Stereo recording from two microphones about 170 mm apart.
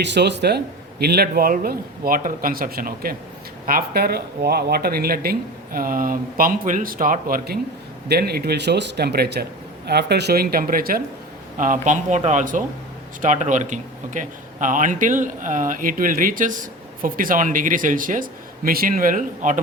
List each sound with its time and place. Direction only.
0.0 s a man's voice: 85° right; by 19.5 s 50° right (ahead or behind)